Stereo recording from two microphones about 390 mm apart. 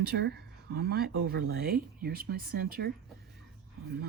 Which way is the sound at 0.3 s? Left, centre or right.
Right.